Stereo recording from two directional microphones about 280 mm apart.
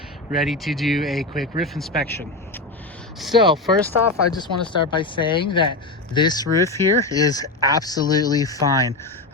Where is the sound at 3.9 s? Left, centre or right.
Centre.